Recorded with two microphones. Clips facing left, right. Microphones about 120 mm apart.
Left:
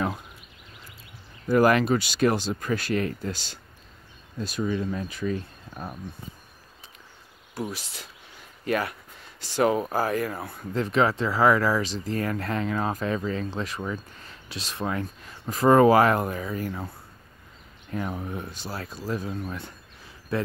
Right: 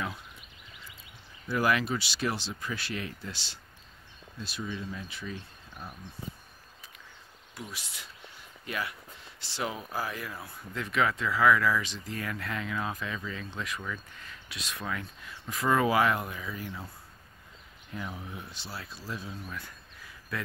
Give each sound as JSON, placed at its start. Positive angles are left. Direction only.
{"t": 1.5, "sound": "speech", "side_deg": 45}
{"t": 7.7, "sound": "speech", "side_deg": 40}
{"t": 8.6, "sound": "speech", "side_deg": 50}
{"t": 10.7, "sound": "speech", "side_deg": 35}
{"t": 17.9, "sound": "speech", "side_deg": 50}
{"t": 20.3, "sound": "speech", "side_deg": 30}